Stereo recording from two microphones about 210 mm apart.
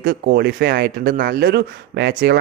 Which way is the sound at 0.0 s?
50° right (ahead or behind).